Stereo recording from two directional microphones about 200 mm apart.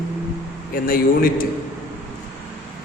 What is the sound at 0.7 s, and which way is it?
Speech, 45° left (ahead or behind).